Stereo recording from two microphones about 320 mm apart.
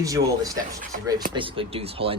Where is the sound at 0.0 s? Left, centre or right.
Centre.